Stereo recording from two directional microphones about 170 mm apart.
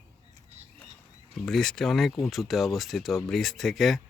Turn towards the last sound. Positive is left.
turn(degrees=0)  # may be behind; listen again after turning